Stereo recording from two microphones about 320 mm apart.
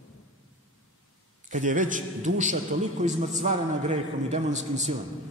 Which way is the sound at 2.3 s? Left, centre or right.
Right.